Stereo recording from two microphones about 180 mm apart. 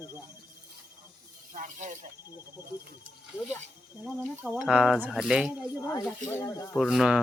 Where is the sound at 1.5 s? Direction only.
45° right (ahead or behind).